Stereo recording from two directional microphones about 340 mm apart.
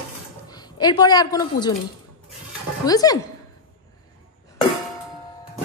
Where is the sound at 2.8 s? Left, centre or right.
Centre.